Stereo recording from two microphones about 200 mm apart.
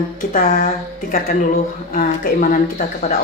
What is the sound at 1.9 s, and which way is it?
A woman's voice, 45° left (ahead or behind).